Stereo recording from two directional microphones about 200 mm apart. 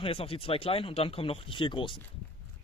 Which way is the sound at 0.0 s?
25° left (ahead or behind).